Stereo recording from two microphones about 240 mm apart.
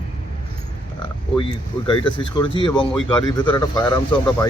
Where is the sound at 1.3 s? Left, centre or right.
Centre.